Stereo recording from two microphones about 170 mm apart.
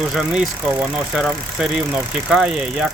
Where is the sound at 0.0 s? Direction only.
5° right (ahead or behind).